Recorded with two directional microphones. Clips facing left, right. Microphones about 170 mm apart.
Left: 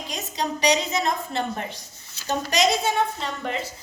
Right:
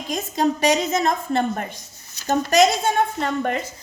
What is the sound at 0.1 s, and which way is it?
A woman's voice, 50° right (ahead or behind).